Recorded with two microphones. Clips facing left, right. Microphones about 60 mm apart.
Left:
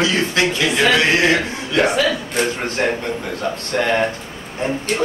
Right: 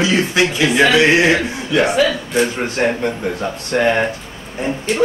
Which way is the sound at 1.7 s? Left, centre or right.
Centre.